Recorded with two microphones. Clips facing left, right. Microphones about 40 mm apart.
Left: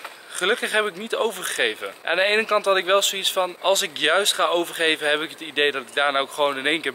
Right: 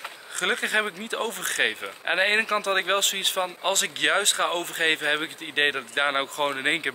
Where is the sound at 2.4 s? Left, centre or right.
Centre.